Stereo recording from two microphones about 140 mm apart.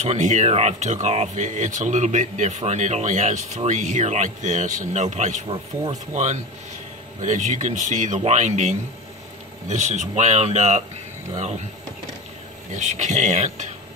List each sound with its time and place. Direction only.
0.0 s speech: 55° right (ahead or behind)
7.2 s speech: 60° right (ahead or behind)
12.7 s speech: 55° right (ahead or behind)